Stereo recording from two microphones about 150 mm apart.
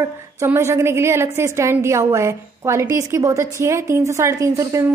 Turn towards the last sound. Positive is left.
turn(degrees=-20)  # may be behind; listen again after turning